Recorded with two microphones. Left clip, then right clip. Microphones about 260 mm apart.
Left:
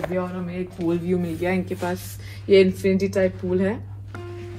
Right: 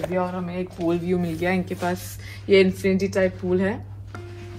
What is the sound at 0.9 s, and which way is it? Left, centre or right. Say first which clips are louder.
Speech: even; right.